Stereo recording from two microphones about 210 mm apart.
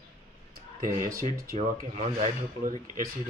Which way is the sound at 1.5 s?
35° right (ahead or behind).